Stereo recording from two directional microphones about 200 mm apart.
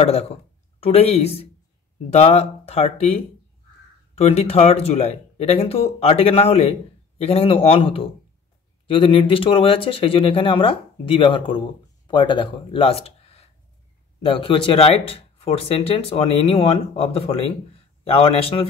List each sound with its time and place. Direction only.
0.0 s speech: 30° left (ahead or behind)